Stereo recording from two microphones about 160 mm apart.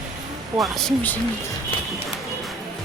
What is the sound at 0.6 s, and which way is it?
Speech, centre (ahead or behind).